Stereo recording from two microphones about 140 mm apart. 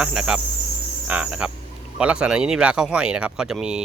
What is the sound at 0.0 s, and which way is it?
Cricket, 5° right (ahead or behind).